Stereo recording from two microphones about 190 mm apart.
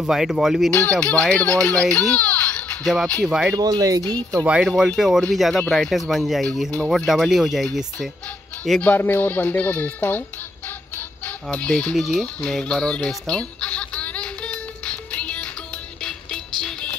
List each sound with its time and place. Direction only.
0.0 s speech: centre (ahead or behind)
3.5 s speech: 20° right (ahead or behind)
4.5 s speech: 5° right (ahead or behind)
11.2 s chicken: 5° left (ahead or behind)
16.0 s music: 5° left (ahead or behind)